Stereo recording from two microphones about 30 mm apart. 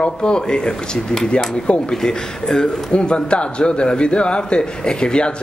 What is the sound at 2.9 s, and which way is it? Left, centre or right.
A man's voice, left.